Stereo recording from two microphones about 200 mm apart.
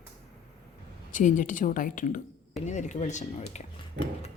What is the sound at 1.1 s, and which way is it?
A woman's voice, 40° left (ahead or behind).